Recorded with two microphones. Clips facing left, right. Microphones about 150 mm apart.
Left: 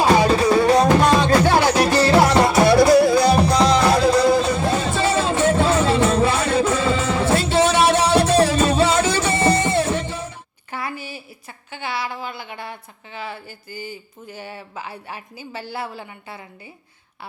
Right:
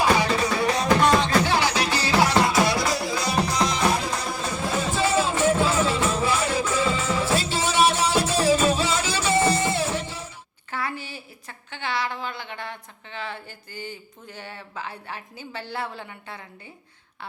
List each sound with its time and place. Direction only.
1.0 s music: 50° left (ahead or behind)
10.7 s a sound: 15° left (ahead or behind)
13.1 s speech: 10° left (ahead or behind)